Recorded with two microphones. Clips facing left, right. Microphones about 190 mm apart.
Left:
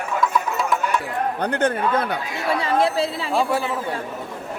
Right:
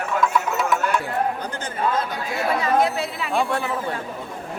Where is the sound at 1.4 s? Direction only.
65° left (ahead or behind).